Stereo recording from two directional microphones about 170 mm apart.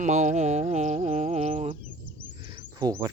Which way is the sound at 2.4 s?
30° right (ahead or behind).